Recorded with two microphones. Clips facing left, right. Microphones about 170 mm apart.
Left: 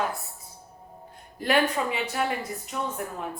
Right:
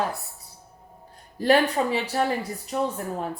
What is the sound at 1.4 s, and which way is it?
Speech, 35° right (ahead or behind).